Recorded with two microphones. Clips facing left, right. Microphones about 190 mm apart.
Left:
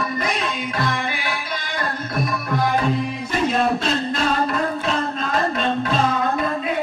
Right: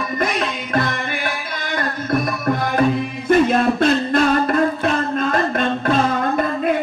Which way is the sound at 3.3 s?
55° right (ahead or behind).